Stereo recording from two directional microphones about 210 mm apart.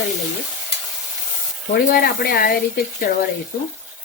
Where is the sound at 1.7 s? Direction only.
45° left (ahead or behind).